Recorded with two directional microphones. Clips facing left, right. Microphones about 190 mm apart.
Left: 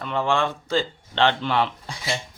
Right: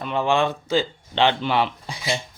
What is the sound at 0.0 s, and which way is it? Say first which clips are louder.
Speech: right 2 dB; 15° right (ahead or behind).